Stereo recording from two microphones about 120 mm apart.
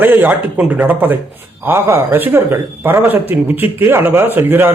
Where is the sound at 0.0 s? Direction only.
15° right (ahead or behind).